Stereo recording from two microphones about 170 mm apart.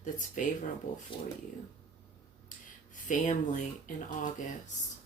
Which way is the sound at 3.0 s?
50° left (ahead or behind).